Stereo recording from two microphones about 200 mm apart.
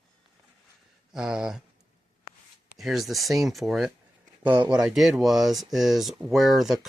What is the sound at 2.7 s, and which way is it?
Speech, centre (ahead or behind).